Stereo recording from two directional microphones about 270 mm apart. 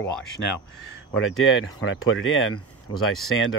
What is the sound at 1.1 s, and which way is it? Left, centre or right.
Speech, left.